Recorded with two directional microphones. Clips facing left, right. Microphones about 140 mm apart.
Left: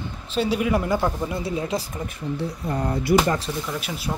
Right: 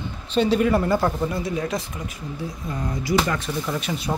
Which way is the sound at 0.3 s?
5° left (ahead or behind).